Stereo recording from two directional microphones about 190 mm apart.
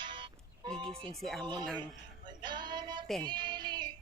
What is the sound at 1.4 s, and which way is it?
Speech, 25° right (ahead or behind).